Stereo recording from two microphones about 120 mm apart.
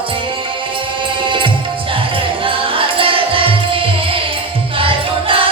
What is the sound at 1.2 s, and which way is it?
Music, 45° right (ahead or behind).